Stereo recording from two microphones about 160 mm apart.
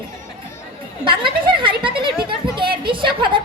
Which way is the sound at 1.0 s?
30° right (ahead or behind).